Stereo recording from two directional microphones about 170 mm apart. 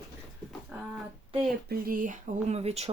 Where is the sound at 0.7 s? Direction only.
5° right (ahead or behind).